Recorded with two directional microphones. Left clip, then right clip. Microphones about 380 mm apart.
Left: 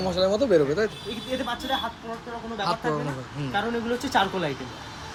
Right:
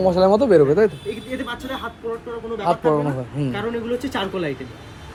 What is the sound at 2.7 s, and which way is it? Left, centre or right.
Speech, centre.